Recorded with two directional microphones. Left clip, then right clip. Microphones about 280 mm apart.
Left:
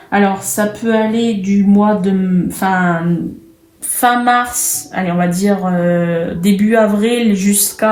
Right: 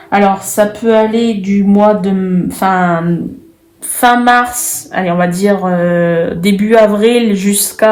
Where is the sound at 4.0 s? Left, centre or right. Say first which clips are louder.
Right 4 dB; right.